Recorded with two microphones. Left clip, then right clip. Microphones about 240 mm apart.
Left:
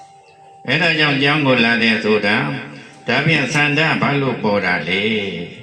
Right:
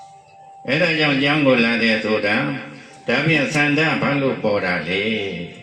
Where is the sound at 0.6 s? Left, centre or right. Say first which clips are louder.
Left 2 dB; left.